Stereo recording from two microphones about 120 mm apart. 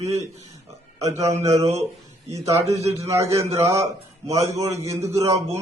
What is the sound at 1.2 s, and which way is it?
Speech, 65° right (ahead or behind).